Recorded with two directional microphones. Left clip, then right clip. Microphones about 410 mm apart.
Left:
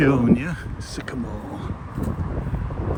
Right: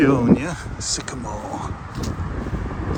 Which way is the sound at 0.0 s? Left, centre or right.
Centre.